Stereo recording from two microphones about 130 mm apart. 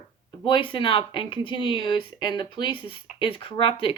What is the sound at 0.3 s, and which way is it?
Speech, 40° left (ahead or behind).